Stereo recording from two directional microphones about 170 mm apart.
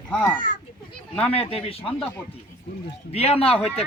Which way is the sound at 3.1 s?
35° left (ahead or behind).